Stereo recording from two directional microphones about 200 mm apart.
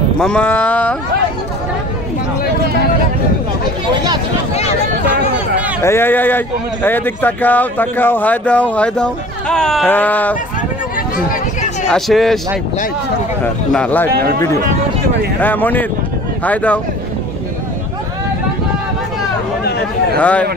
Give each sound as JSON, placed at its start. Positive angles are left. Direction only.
{"t": 0.2, "sound": "speech", "side_deg": 5}
{"t": 3.9, "sound": "speech", "side_deg": -20}
{"t": 5.8, "sound": "speech", "side_deg": 10}
{"t": 11.9, "sound": "a man's voice", "side_deg": 0}
{"t": 13.4, "sound": "speech", "side_deg": 10}
{"t": 15.4, "sound": "speech", "side_deg": 10}
{"t": 20.2, "sound": "speech", "side_deg": 5}